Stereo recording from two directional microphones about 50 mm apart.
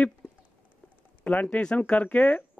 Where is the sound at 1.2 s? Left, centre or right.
Left.